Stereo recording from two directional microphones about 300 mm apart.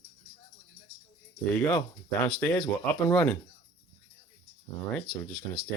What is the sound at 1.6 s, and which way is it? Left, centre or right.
Speech, centre.